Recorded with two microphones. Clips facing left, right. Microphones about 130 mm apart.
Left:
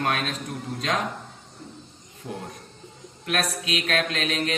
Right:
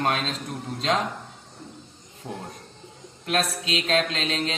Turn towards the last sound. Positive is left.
turn(degrees=-25)  # may be behind; listen again after turning